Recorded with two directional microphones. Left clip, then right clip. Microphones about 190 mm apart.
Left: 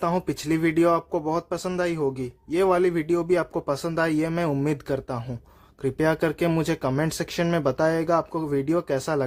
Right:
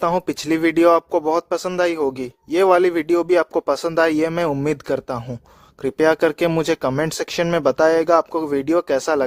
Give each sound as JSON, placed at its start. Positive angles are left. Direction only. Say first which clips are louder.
{"t": 0.3, "sound": "speech", "louder": "right 5 dB", "side_deg": -40}